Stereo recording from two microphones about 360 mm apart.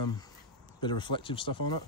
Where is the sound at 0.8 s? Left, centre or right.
Centre.